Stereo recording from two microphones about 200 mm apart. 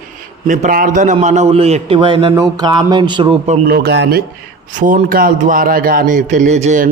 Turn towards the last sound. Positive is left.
turn(degrees=-35)  # may be behind; listen again after turning